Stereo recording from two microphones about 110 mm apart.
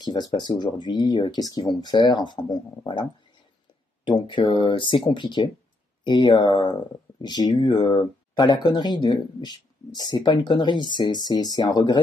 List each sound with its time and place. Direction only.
0.0 s speech: 40° left (ahead or behind)